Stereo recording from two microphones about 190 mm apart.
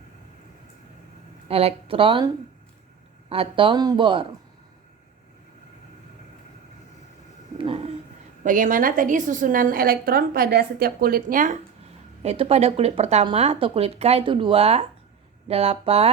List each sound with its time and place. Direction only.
1.5 s speech: 30° right (ahead or behind)
7.6 s a sound: 30° right (ahead or behind)
8.4 s a woman's voice: 45° right (ahead or behind)
12.2 s speech: 35° right (ahead or behind)